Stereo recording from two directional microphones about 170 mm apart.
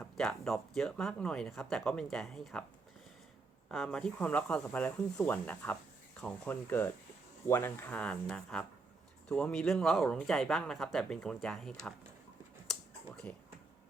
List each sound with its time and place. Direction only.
0.0 s speech: 5° left (ahead or behind)
3.7 s speech: 5° left (ahead or behind)
12.7 s a sound: 5° left (ahead or behind)
13.3 s speech: 10° left (ahead or behind)